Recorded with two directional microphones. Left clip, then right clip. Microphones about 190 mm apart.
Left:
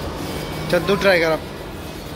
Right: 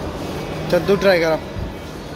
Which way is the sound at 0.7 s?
5° right (ahead or behind).